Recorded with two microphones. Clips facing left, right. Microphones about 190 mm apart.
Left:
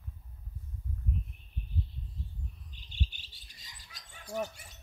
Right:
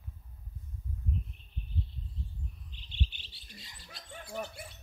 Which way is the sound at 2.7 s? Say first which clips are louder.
Right 1 dB; 45° left (ahead or behind).